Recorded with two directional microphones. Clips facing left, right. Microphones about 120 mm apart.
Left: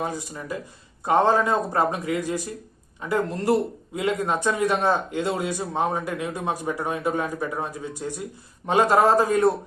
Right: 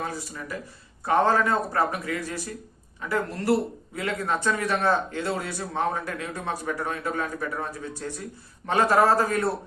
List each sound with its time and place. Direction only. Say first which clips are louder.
0.0 s speech: left 3 dB; 15° left (ahead or behind)